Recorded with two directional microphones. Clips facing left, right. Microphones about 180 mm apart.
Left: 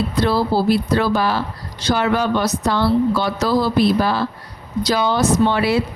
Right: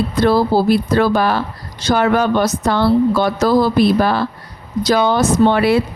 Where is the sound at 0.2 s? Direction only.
50° right (ahead or behind).